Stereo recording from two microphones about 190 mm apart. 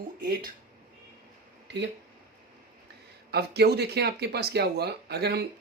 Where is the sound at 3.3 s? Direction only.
60° right (ahead or behind).